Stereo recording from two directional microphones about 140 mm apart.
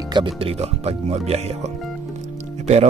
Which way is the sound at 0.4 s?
45° right (ahead or behind).